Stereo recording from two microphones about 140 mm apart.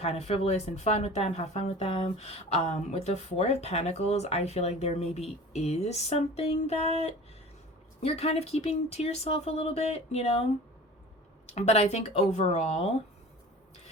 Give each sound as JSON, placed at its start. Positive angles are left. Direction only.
{"t": 0.0, "sound": "speech", "side_deg": 45}
{"t": 8.0, "sound": "speech", "side_deg": 45}
{"t": 11.4, "sound": "speech", "side_deg": 50}